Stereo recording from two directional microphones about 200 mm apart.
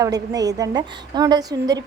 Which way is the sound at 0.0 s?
20° right (ahead or behind).